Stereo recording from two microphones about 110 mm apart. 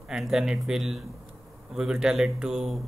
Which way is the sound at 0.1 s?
5° right (ahead or behind).